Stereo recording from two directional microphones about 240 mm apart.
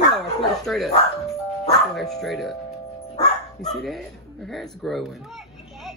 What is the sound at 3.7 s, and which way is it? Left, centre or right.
Speech, centre.